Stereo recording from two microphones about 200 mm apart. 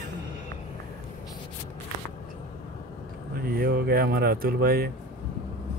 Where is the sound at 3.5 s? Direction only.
50° right (ahead or behind).